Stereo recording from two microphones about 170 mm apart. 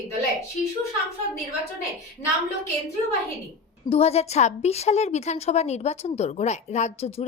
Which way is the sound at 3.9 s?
40° left (ahead or behind).